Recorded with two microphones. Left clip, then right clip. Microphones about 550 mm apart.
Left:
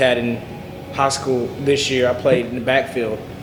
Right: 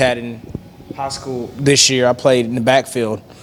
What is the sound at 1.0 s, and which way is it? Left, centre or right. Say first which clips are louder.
Speech: left 6 dB; right.